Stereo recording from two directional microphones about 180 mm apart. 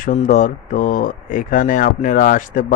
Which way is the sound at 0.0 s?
45° left (ahead or behind).